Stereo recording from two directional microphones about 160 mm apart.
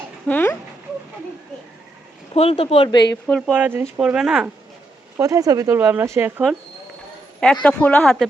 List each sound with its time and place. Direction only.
0.3 s speech: 10° left (ahead or behind)
2.3 s speech: 40° left (ahead or behind)
3.2 s speech: 5° left (ahead or behind)
3.5 s speech: 10° right (ahead or behind)
5.1 s speech: 20° right (ahead or behind)
7.3 s speech: 5° left (ahead or behind)